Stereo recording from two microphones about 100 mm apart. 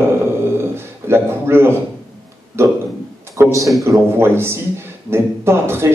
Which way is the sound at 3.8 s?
25° right (ahead or behind).